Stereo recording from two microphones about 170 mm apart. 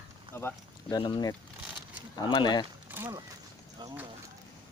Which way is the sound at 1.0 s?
25° left (ahead or behind).